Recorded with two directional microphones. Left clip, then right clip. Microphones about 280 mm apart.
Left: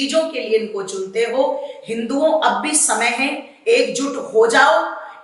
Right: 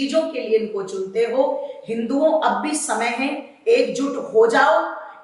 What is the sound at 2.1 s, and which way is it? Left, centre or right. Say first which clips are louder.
Speech: left 1 dB; right.